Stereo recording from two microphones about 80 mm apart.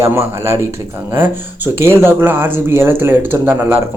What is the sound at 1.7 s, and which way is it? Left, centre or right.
Speech, right.